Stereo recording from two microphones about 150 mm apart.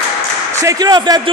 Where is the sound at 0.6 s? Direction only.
25° right (ahead or behind).